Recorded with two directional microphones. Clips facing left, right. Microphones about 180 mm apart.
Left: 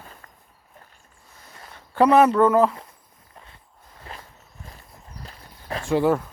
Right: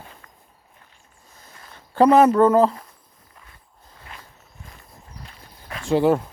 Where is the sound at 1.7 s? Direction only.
35° right (ahead or behind).